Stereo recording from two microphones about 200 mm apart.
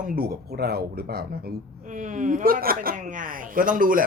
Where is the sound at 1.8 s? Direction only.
40° right (ahead or behind).